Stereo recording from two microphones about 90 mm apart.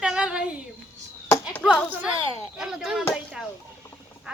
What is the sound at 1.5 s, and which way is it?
Speech, 15° left (ahead or behind).